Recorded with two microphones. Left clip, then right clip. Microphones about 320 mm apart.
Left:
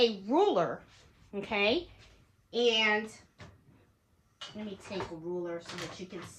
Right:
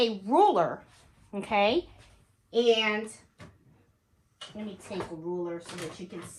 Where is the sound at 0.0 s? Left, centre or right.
Centre.